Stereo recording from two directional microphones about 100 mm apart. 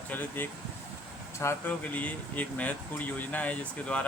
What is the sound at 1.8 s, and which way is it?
Speech, 15° left (ahead or behind).